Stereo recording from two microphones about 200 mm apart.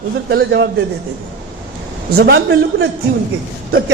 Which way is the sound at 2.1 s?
50° right (ahead or behind).